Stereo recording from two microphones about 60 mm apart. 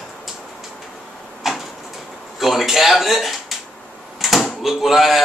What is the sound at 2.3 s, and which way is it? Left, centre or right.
Speech, centre.